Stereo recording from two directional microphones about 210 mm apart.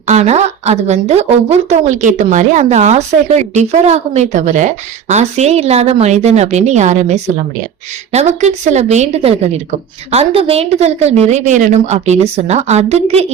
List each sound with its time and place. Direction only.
0.1 s a woman's voice: 30° right (ahead or behind)